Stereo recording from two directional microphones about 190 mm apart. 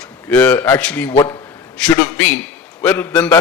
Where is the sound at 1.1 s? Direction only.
25° left (ahead or behind).